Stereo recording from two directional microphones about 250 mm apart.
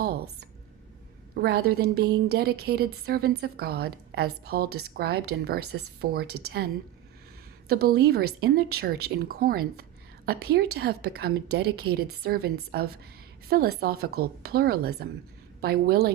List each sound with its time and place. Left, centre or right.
0.0 s a sound: right
1.4 s a woman's voice: right
7.7 s a woman's voice: right